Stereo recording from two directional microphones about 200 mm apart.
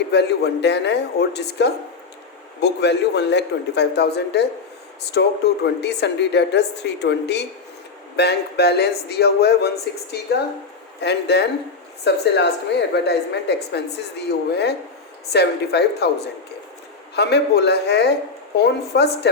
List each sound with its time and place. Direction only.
0.1 s a woman's voice: 55° left (ahead or behind)